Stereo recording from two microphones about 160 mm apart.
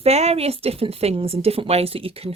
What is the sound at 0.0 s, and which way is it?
Speech, 40° right (ahead or behind).